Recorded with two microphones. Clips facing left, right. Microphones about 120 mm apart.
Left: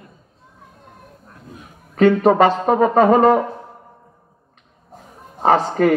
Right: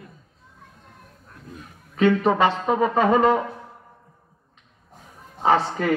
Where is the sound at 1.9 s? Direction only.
50° left (ahead or behind).